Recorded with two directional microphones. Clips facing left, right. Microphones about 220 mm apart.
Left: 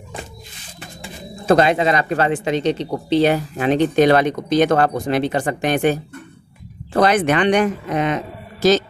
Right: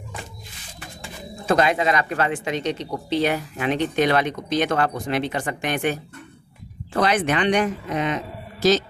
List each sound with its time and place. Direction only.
1.5 s speech: 30° left (ahead or behind); by 8.2 s 55° left (ahead or behind)